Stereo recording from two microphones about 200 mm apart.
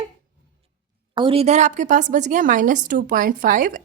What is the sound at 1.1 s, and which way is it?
A woman's voice, 25° right (ahead or behind).